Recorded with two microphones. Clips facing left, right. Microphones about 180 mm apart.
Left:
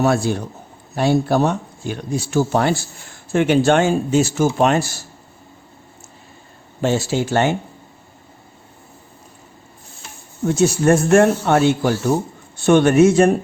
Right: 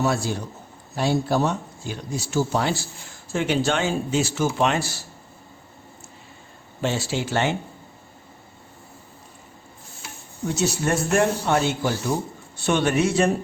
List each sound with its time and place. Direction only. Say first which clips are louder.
0.0 s a man's voice: left 6 dB; 60° left (ahead or behind)
6.8 s a man's voice: left 6 dB; 45° left (ahead or behind)
10.4 s a man's voice: left 8 dB; 50° left (ahead or behind)
12.5 s a man's voice: left 9 dB; 50° left (ahead or behind)